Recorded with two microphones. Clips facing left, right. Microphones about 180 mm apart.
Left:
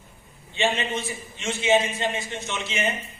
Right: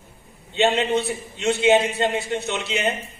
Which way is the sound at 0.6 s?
65° right (ahead or behind).